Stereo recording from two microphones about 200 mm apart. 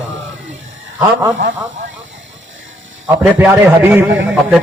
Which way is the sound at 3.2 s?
10° right (ahead or behind).